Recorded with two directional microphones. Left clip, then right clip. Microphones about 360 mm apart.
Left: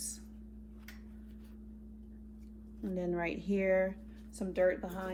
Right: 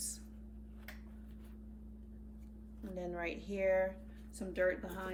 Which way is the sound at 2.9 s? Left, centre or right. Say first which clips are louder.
Left 5 dB; centre.